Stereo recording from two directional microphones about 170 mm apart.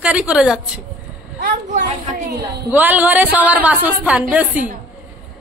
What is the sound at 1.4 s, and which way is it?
Speech, 50° right (ahead or behind).